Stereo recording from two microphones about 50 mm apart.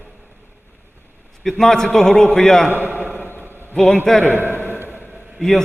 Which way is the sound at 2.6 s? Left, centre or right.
Right.